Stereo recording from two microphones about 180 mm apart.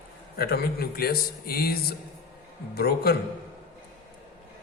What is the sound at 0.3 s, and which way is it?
Speech, 60° left (ahead or behind).